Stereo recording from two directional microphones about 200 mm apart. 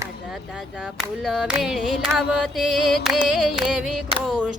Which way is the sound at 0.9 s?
Centre (ahead or behind).